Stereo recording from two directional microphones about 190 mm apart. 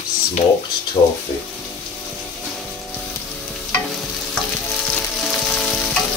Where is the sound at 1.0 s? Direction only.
30° left (ahead or behind).